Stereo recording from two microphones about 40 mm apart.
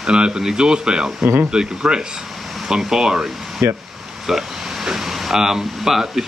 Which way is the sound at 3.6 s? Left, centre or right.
Right.